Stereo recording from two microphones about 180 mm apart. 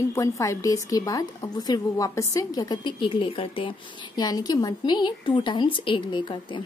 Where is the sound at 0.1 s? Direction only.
15° left (ahead or behind).